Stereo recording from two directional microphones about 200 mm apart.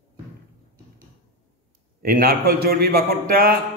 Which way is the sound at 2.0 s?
45° right (ahead or behind).